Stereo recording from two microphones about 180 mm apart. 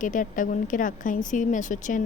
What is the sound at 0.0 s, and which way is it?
Speech, 45° left (ahead or behind).